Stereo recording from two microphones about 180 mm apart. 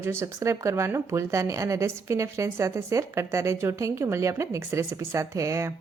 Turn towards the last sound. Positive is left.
turn(degrees=-15)  # may be behind; listen again after turning